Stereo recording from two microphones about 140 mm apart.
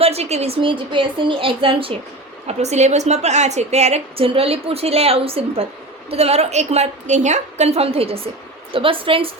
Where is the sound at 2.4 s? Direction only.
55° right (ahead or behind).